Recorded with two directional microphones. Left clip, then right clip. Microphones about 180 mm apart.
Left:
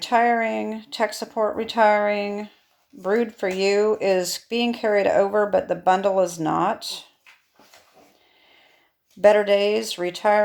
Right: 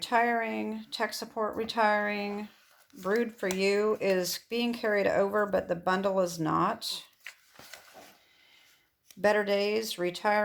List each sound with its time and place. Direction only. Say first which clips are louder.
0.0 s speech: left 8 dB; 25° right (ahead or behind)
9.2 s speech: left 10 dB; 20° right (ahead or behind)